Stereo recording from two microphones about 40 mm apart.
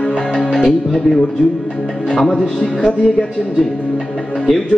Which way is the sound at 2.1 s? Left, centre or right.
Centre.